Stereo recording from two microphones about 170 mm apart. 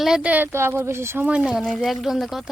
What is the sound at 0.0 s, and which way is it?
Speech, 5° right (ahead or behind).